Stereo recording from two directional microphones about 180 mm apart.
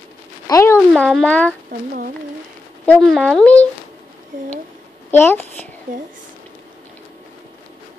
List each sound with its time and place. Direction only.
0.5 s a sound: 15° left (ahead or behind)
0.7 s speech: centre (ahead or behind)
2.8 s a child's voice: 10° left (ahead or behind)
5.1 s a child's voice: 10° left (ahead or behind)